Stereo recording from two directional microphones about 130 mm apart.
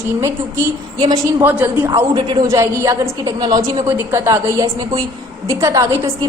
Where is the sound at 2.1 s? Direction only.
35° right (ahead or behind).